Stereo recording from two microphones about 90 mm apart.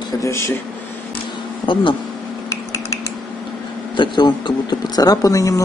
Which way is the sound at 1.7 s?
65° left (ahead or behind).